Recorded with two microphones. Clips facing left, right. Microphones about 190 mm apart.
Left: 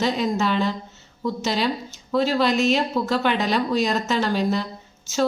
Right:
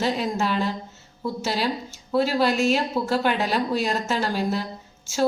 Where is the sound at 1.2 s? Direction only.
10° right (ahead or behind).